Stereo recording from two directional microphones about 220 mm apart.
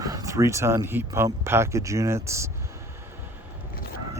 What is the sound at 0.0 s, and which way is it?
Speech, 15° right (ahead or behind).